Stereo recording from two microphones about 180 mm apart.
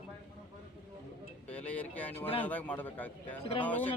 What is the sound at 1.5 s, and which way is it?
Speech, 10° left (ahead or behind).